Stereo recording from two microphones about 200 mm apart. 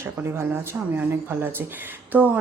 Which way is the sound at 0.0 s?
10° right (ahead or behind).